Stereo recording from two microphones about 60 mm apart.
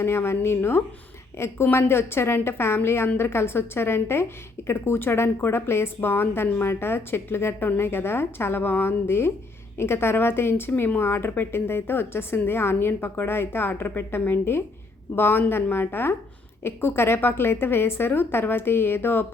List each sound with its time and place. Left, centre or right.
0.0 s a woman's voice: left